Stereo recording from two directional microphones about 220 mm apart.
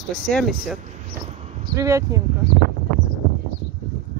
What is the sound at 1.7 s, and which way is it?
Speech, 15° right (ahead or behind).